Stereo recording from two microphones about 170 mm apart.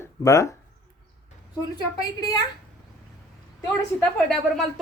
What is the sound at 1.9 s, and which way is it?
Speech, 25° left (ahead or behind).